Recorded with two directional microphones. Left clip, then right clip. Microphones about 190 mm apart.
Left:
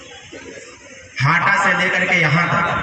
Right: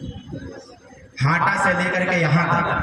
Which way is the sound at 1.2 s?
80° right.